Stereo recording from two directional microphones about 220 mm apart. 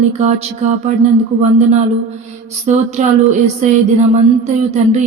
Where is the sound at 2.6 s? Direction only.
30° right (ahead or behind).